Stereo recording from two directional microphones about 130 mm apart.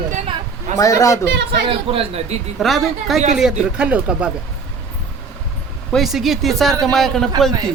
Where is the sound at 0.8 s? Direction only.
25° left (ahead or behind).